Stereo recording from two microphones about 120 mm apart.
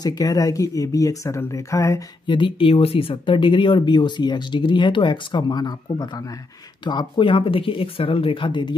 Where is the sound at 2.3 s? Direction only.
45° left (ahead or behind).